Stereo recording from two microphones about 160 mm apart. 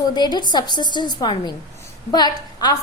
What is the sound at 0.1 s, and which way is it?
A woman's voice, 25° left (ahead or behind).